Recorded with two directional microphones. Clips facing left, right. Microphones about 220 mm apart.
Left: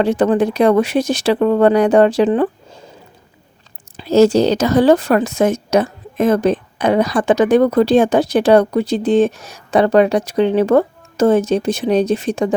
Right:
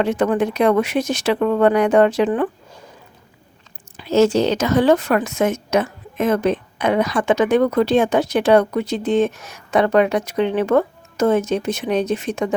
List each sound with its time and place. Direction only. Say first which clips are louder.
0.0 s a woman's voice: left 4 dB; 35° left (ahead or behind)
3.9 s a woman's voice: left 4 dB; 35° left (ahead or behind)